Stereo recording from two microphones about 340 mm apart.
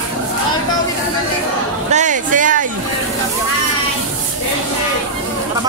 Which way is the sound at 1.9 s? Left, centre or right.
Right.